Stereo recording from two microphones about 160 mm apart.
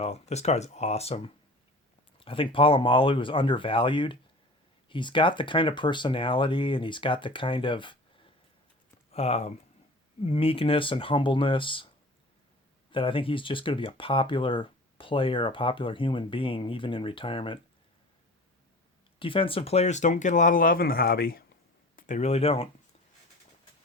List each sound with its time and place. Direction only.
0.0 s speech: 40° left (ahead or behind)
12.9 s speech: 35° left (ahead or behind)
19.2 s speech: 35° left (ahead or behind); by 21.4 s 70° left (ahead or behind)
21.9 s speech: 50° left (ahead or behind)